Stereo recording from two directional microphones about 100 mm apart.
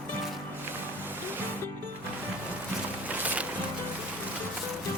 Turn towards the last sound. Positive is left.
turn(degrees=-15)  # may be behind; listen again after turning